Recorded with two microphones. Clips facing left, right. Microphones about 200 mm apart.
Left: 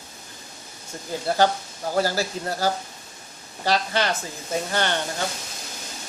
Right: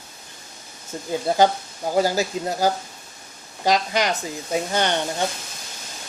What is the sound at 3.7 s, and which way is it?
Speech, 15° right (ahead or behind).